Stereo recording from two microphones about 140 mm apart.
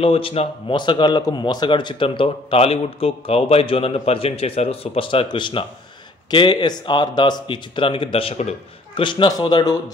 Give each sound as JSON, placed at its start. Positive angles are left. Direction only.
{"t": 0.0, "sound": "speech", "side_deg": 40}
{"t": 9.0, "sound": "speech", "side_deg": 35}